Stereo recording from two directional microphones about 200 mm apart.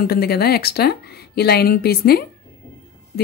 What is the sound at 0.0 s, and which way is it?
A woman's voice, 50° left (ahead or behind).